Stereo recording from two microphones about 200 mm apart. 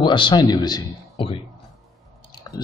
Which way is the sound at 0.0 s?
25° left (ahead or behind).